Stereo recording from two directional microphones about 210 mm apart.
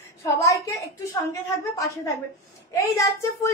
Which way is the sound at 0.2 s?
15° left (ahead or behind).